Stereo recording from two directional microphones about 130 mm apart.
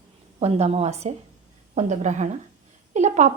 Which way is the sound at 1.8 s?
70° right (ahead or behind).